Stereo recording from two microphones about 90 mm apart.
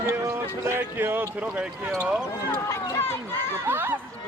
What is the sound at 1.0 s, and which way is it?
Speech, 25° right (ahead or behind).